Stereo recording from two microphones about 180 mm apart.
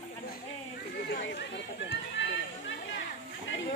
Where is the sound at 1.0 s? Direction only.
70° left (ahead or behind).